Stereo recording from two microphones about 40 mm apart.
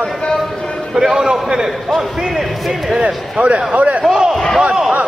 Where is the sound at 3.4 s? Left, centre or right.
Right.